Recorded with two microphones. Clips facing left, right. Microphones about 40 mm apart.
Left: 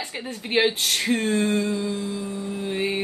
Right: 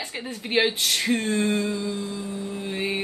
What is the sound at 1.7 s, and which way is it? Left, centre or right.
Humming, left.